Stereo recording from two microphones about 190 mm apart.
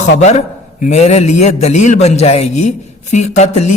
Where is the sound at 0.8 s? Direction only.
35° left (ahead or behind).